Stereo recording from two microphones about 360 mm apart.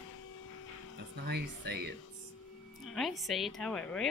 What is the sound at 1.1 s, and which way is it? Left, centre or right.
Speech, right.